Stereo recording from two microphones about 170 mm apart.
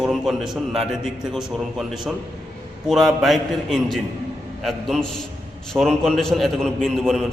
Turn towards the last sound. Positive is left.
turn(degrees=0)  # may be behind; listen again after turning